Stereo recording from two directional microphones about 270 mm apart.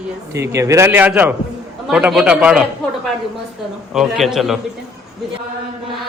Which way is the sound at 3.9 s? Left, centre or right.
Centre.